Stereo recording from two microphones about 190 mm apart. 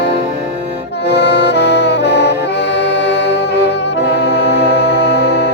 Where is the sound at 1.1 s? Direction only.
65° left (ahead or behind).